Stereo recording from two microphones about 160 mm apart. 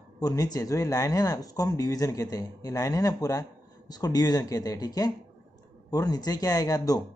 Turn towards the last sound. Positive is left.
turn(degrees=25)  # may be behind; listen again after turning